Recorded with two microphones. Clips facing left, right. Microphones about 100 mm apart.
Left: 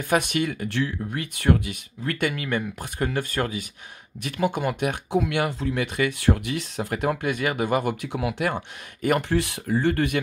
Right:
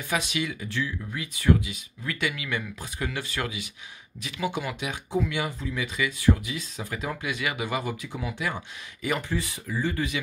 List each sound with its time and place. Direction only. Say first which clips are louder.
0.1 s speech: left 6 dB; 55° left (ahead or behind)
5.1 s speech: left 2 dB; 70° left (ahead or behind)